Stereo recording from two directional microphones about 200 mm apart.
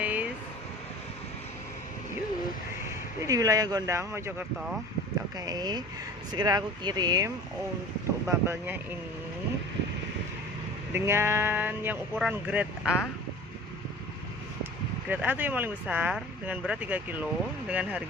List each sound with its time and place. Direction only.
0.0 s vehicle: 10° right (ahead or behind)
3.2 s speech: 15° right (ahead or behind)
10.9 s speech: 10° right (ahead or behind)
15.0 s speech: 10° right (ahead or behind)